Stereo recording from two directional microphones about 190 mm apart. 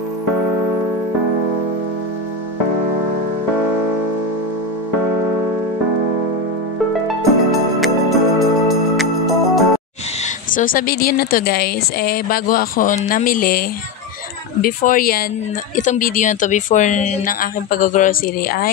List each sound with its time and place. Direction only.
7.8 s music: centre (ahead or behind)
10.5 s a woman's voice: 45° left (ahead or behind)